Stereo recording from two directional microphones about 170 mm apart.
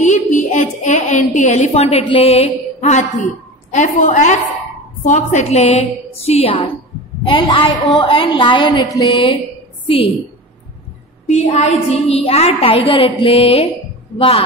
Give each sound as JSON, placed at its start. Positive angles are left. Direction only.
{"t": 0.0, "sound": "a sound", "side_deg": 45}
{"t": 3.7, "sound": "a woman's voice", "side_deg": 45}
{"t": 11.2, "sound": "a woman's voice", "side_deg": 40}